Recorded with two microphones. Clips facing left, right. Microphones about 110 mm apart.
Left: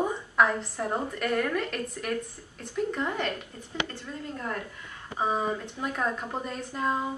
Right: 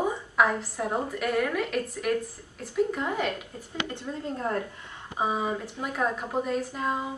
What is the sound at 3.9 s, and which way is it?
Speech, 20° right (ahead or behind).